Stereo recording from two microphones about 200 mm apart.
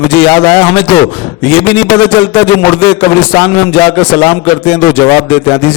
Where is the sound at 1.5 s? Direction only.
10° left (ahead or behind).